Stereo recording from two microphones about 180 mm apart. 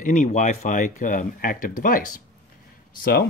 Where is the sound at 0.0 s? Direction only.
40° left (ahead or behind).